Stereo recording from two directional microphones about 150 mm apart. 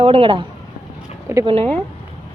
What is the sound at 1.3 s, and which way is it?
Speech, 15° right (ahead or behind).